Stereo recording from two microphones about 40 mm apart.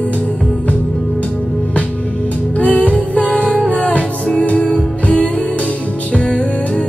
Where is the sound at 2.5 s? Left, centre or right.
Left.